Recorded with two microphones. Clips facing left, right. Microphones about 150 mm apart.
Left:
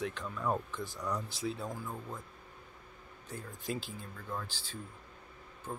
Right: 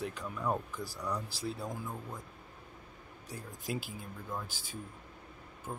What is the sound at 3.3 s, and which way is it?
Speech, 10° right (ahead or behind).